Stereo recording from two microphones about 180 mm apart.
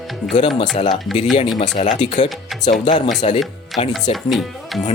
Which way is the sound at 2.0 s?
40° left (ahead or behind).